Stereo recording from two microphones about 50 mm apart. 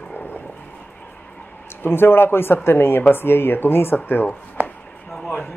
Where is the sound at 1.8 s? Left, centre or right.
Left.